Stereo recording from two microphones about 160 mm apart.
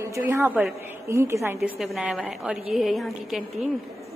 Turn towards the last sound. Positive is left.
turn(degrees=0)  # may be behind; listen again after turning